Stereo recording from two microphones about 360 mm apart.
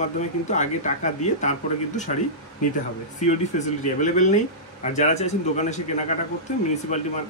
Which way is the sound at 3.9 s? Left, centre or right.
Left.